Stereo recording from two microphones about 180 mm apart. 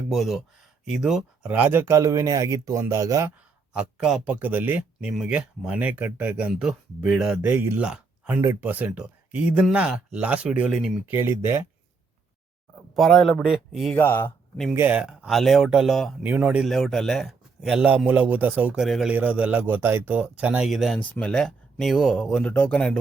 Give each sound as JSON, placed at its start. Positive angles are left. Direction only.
{"t": 0.1, "sound": "speech", "side_deg": 0}
{"t": 3.7, "sound": "speech", "side_deg": -5}
{"t": 13.0, "sound": "speech", "side_deg": 0}
{"t": 13.9, "sound": "speech", "side_deg": 10}
{"t": 14.7, "sound": "speech", "side_deg": -10}